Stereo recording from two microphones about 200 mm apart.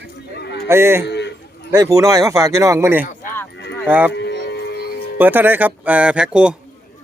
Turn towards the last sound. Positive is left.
turn(degrees=-5)  # may be behind; listen again after turning